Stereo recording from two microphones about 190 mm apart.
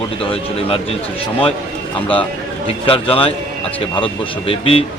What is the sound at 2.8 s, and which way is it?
A man's voice, 30° left (ahead or behind).